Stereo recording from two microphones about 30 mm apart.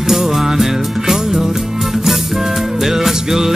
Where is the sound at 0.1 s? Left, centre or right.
Centre.